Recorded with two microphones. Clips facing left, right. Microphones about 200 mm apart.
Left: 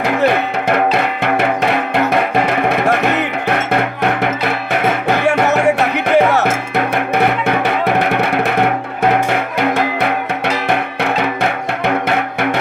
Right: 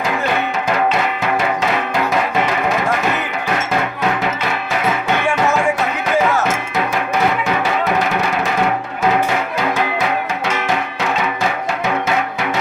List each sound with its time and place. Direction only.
2.5 s music: 60° left (ahead or behind)
4.7 s music: 60° left (ahead or behind)
9.6 s music: 60° left (ahead or behind)
12.0 s music: 60° left (ahead or behind)